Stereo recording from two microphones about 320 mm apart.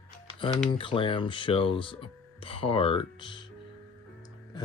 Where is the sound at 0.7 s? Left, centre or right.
Centre.